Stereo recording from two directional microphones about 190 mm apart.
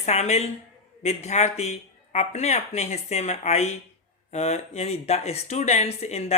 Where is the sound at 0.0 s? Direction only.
35° left (ahead or behind).